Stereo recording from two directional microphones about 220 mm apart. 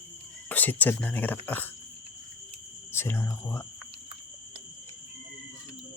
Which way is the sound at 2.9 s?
10° left (ahead or behind).